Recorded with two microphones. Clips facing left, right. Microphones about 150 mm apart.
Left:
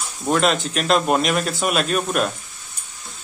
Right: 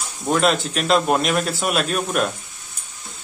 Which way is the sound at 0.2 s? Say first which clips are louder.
Even; centre (ahead or behind).